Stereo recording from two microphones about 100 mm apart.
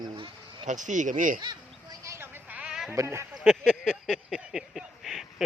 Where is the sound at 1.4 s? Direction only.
45° right (ahead or behind).